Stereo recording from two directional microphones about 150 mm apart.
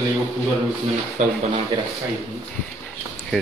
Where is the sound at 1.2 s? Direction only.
50° right (ahead or behind).